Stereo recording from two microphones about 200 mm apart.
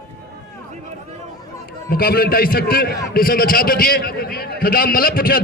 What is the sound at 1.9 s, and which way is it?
A man's voice, 50° left (ahead or behind).